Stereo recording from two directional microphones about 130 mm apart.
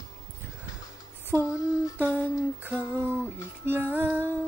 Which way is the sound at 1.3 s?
25° right (ahead or behind).